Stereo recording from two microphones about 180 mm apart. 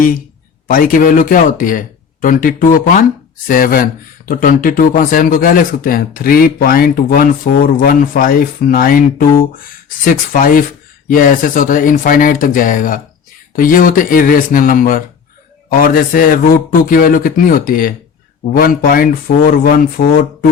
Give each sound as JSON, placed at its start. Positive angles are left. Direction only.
{"t": 0.7, "sound": "speech", "side_deg": 50}